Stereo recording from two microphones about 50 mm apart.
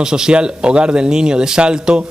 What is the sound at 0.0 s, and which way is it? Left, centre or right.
Speech, centre.